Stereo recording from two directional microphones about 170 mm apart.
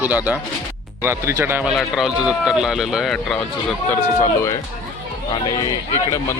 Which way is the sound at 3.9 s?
15° left (ahead or behind).